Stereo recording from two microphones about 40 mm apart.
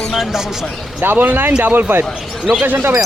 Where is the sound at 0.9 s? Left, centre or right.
Right.